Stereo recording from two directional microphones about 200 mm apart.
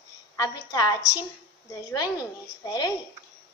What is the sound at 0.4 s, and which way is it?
A woman's voice, 20° left (ahead or behind).